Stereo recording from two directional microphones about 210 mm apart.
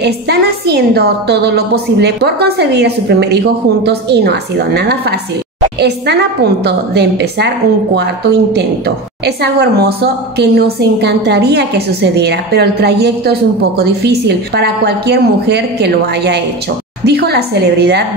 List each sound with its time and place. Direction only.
0.0 s a woman's voice: 50° right (ahead or behind)